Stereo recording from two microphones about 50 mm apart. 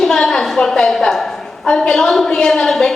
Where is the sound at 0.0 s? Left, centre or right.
Centre.